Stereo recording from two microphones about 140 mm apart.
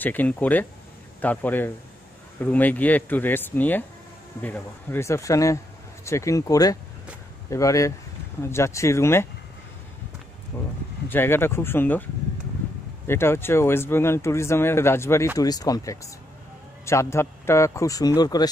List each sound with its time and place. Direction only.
0.0 s a man's voice: 10° left (ahead or behind)
10.5 s a man's voice: 20° left (ahead or behind)
13.0 s a man's voice: 15° left (ahead or behind)